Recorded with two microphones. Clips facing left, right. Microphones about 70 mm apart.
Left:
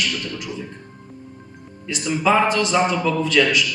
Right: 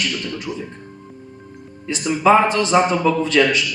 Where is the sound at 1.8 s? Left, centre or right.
Right.